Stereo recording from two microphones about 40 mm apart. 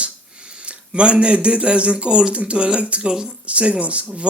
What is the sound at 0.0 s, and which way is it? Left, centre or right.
Speech, right.